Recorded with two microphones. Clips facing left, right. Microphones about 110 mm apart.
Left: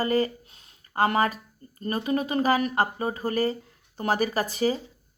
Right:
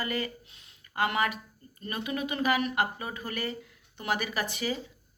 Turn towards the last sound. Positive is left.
turn(degrees=35)  # may be behind; listen again after turning